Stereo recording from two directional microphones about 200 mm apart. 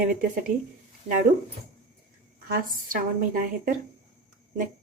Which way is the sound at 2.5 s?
45° right (ahead or behind).